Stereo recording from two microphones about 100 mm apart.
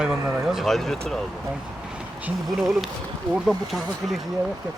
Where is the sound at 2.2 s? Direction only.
5° right (ahead or behind).